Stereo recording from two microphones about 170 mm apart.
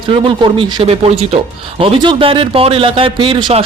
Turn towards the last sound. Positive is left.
turn(degrees=-35)  # may be behind; listen again after turning